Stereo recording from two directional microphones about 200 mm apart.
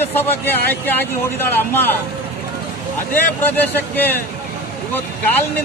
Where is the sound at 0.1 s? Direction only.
10° left (ahead or behind).